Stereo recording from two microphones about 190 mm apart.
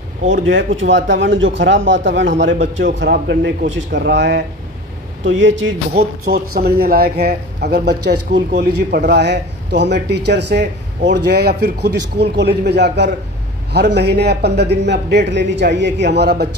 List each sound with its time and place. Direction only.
0.4 s speech: 80° right
3.0 s speech: 65° right (ahead or behind)
5.2 s speech: 80° right; by 16.4 s 60° right (ahead or behind)